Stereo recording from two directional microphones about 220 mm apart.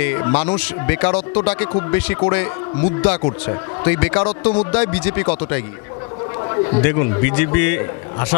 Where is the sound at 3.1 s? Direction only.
30° left (ahead or behind).